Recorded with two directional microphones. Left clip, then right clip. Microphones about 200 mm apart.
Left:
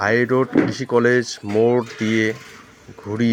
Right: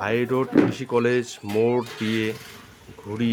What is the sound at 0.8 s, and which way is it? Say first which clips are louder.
Speech: left 5 dB; centre (ahead or behind).